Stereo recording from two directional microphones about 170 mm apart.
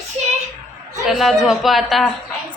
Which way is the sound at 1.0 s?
Centre (ahead or behind).